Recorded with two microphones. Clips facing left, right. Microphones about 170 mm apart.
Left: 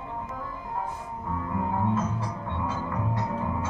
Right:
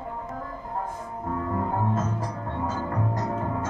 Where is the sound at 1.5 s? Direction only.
45° right (ahead or behind).